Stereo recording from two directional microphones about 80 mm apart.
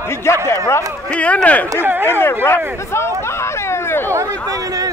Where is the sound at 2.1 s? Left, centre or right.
Left.